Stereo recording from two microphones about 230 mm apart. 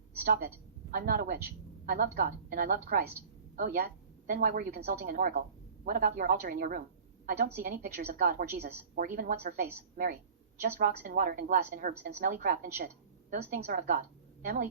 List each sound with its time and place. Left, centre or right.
0.2 s a woman's voice: right